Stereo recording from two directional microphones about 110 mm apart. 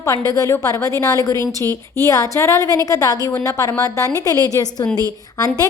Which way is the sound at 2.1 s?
25° left (ahead or behind).